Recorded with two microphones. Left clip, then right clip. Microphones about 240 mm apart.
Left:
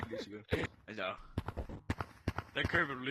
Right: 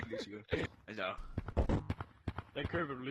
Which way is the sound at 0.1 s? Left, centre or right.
Centre.